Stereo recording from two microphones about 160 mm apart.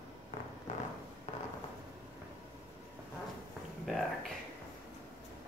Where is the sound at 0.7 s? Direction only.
50° left (ahead or behind).